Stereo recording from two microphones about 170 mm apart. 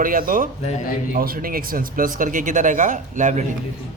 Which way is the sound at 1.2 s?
60° right (ahead or behind).